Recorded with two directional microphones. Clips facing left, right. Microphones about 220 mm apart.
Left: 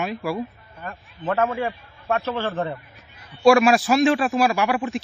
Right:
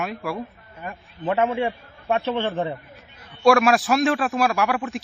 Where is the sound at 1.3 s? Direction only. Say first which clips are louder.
Right 1 dB; 15° right (ahead or behind).